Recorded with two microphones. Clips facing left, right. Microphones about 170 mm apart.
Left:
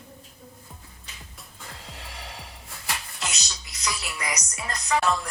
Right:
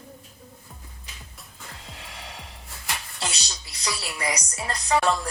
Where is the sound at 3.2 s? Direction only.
30° right (ahead or behind).